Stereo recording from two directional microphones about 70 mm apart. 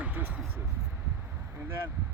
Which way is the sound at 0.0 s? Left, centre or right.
Right.